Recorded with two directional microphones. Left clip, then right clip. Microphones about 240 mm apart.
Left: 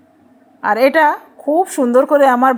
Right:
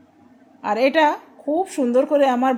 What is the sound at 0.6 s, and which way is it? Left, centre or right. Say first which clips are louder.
A woman's voice: left 5 dB; centre.